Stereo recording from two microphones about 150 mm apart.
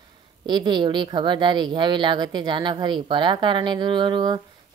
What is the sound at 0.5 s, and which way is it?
Speech, 30° right (ahead or behind).